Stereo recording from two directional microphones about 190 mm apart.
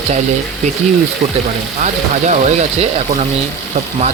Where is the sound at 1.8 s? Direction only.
40° right (ahead or behind).